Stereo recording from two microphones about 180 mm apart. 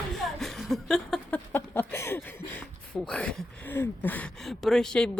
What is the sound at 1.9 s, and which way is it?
Speech, 15° left (ahead or behind).